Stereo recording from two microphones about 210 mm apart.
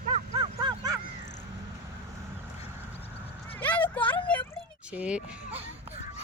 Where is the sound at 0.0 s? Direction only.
30° right (ahead or behind).